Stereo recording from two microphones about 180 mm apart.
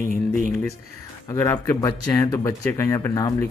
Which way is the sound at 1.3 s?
15° left (ahead or behind).